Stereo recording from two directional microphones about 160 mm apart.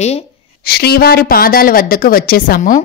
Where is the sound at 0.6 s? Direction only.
80° left.